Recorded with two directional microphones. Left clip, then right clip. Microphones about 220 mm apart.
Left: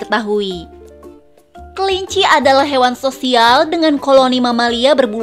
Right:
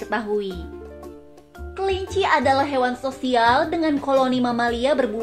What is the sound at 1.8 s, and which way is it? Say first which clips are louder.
A woman's voice: left 8 dB; 45° left (ahead or behind).